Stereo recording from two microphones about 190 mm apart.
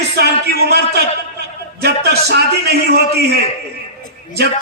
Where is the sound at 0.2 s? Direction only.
60° right (ahead or behind).